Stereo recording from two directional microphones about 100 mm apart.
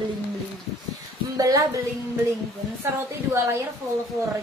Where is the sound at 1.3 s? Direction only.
35° right (ahead or behind).